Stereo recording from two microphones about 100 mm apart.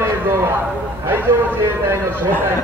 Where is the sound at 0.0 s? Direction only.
25° right (ahead or behind).